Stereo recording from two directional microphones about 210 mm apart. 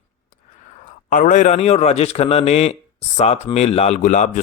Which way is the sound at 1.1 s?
40° left (ahead or behind).